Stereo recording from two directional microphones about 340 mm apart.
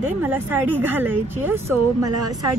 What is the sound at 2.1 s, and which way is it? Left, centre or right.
Speech, right.